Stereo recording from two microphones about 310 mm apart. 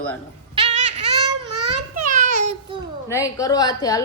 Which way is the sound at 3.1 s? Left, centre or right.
Centre.